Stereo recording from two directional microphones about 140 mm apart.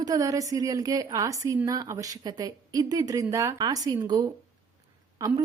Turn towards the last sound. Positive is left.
turn(degrees=-25)  # may be behind; listen again after turning